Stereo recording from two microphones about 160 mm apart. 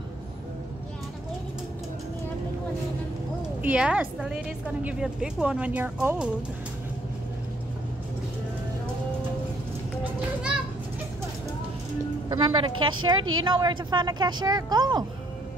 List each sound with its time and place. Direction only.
3.6 s a woman's voice: 5° right (ahead or behind)
12.3 s a woman's voice: 30° right (ahead or behind)